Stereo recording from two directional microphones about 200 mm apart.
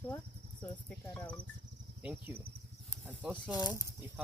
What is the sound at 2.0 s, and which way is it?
Speech, 10° right (ahead or behind).